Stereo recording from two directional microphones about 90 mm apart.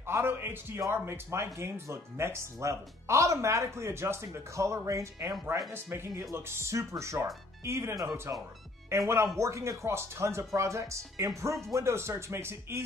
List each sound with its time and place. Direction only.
0.0 s a man's voice: 25° right (ahead or behind)